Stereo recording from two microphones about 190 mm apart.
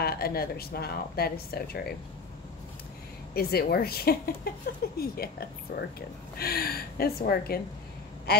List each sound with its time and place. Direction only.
0.0 s speech: 55° left (ahead or behind)
3.3 s speech: 55° left (ahead or behind)
8.3 s quack: 55° left (ahead or behind)